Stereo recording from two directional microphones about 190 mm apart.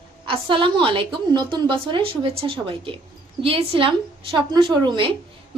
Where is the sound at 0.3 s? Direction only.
25° right (ahead or behind).